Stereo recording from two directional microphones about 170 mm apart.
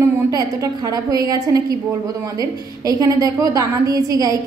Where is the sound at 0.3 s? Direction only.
20° right (ahead or behind).